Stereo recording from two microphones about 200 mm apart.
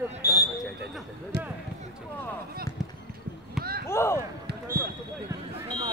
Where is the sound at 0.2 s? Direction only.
15° left (ahead or behind).